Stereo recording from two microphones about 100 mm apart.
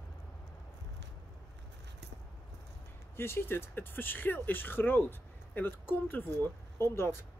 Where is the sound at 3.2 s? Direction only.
25° left (ahead or behind).